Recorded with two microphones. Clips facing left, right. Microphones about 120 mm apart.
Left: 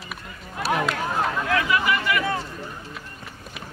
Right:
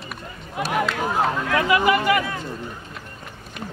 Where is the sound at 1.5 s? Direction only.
30° right (ahead or behind).